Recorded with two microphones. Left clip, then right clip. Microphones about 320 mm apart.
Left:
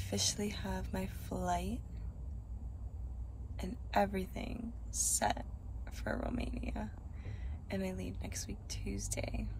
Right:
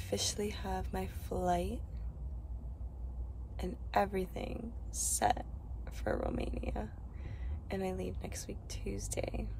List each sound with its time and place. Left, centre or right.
0.0 s speech: centre
3.5 s speech: centre